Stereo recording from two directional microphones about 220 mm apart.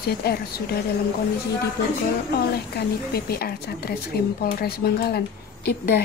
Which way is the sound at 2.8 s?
45° left (ahead or behind).